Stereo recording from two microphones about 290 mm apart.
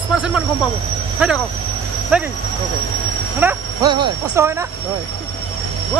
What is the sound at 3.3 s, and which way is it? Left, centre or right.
Vehicle, centre.